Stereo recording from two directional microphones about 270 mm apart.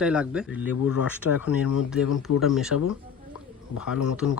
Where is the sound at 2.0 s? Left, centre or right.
Left.